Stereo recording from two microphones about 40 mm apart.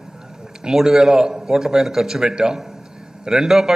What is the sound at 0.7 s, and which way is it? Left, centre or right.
A man's voice, centre.